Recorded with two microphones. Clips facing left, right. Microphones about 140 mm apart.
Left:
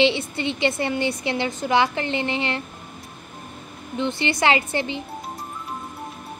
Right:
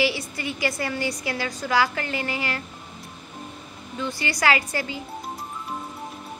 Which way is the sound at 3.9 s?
25° left (ahead or behind).